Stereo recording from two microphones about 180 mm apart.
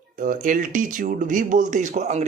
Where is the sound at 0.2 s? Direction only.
45° right (ahead or behind).